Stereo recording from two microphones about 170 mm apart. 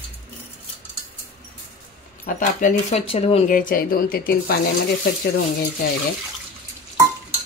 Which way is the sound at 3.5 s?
55° left (ahead or behind).